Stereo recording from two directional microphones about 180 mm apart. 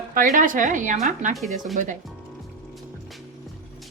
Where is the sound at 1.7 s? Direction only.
45° right (ahead or behind).